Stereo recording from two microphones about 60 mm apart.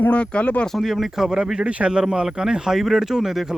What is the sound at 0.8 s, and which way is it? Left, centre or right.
Speech, centre.